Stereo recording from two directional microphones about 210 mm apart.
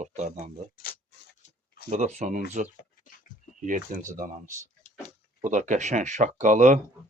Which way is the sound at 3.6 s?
40° right (ahead or behind).